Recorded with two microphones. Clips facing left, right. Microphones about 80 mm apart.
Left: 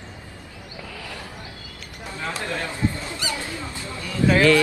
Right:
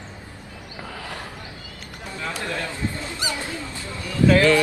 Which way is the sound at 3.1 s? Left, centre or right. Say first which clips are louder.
Right 1 dB; right.